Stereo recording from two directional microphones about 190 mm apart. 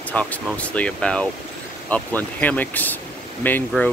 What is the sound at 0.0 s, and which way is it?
Speech, 5° left (ahead or behind).